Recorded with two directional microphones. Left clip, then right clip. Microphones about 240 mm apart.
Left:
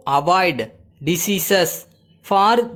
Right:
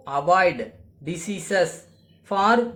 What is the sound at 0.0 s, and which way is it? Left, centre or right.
Speech, left.